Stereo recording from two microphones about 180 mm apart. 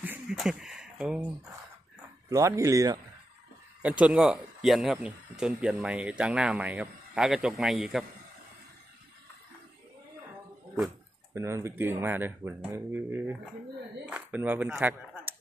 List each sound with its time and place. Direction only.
0.0 s speech: 5° right (ahead or behind)
2.2 s speech: 15° right (ahead or behind)
3.8 s speech: 5° right (ahead or behind)
11.3 s speech: 15° right (ahead or behind)